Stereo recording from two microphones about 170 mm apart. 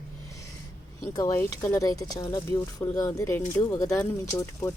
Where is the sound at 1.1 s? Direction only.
20° left (ahead or behind).